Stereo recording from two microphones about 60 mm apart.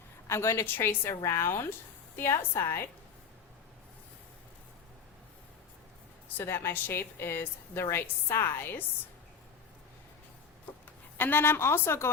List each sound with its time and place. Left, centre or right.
0.3 s a woman's voice: left
0.6 s a woman's voice: left
6.2 s a woman's voice: left
11.2 s a woman's voice: left